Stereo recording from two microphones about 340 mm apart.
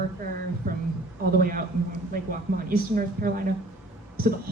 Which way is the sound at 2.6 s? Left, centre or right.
Right.